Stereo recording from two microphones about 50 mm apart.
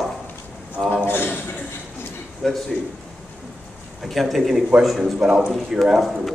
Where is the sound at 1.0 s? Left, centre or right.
Left.